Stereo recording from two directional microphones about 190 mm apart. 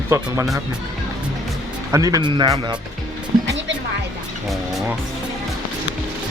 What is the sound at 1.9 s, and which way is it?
Speech, 20° right (ahead or behind).